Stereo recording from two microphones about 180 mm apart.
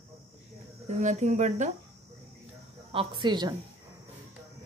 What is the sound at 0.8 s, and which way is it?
Speech, 40° right (ahead or behind).